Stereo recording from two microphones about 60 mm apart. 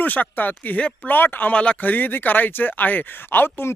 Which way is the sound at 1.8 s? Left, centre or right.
Left.